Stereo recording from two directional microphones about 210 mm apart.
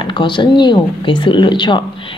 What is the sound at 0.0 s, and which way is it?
A woman's voice, 20° left (ahead or behind).